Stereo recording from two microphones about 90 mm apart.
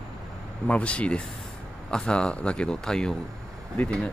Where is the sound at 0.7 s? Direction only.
15° left (ahead or behind).